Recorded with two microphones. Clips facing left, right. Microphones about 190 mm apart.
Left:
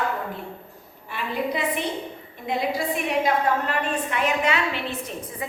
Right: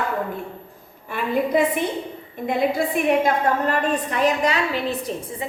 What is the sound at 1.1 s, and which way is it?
A woman's voice, 50° right (ahead or behind).